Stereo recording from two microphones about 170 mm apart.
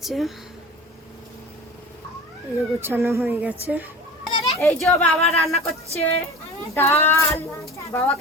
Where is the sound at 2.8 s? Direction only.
15° right (ahead or behind).